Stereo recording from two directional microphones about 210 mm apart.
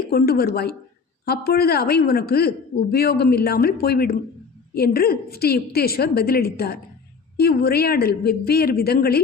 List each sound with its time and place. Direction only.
0.1 s a woman's voice: 45° left (ahead or behind)